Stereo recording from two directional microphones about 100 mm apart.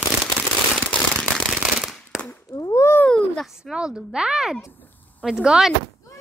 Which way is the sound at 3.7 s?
10° right (ahead or behind).